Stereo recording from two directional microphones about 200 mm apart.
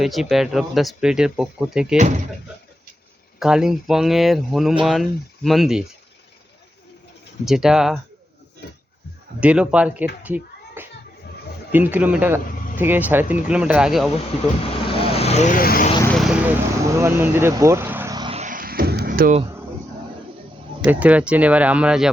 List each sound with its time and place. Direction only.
0.0 s speech: centre (ahead or behind)
3.4 s speech: centre (ahead or behind)
7.4 s speech: centre (ahead or behind)
9.4 s speech: 5° right (ahead or behind)
10.2 s a sound: 10° right (ahead or behind)
11.7 s speech: 10° right (ahead or behind)
14.8 s vehicle: 25° left (ahead or behind); by 15.9 s 45° left (ahead or behind)
16.0 s speech: centre (ahead or behind); by 18.3 s 20° right (ahead or behind)
18.3 s a sound: 40° right (ahead or behind)
20.8 s speech: 5° right (ahead or behind)